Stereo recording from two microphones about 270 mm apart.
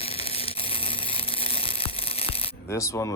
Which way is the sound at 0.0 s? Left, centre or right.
Left.